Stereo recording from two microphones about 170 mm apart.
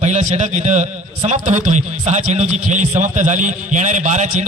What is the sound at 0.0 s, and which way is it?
A man's voice, 45° right (ahead or behind).